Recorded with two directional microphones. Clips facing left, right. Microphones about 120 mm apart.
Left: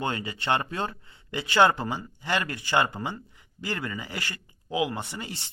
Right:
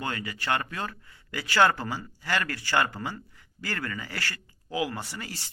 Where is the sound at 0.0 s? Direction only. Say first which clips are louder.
Left 3 dB; 25° left (ahead or behind).